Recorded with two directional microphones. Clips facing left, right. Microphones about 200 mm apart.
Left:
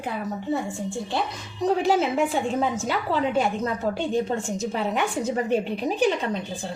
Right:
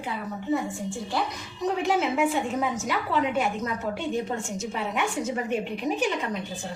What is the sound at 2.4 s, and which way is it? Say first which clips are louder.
A woman's voice: left 3 dB; 30° left (ahead or behind).